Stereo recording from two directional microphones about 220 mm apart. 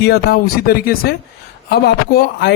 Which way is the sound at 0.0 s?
45° left (ahead or behind).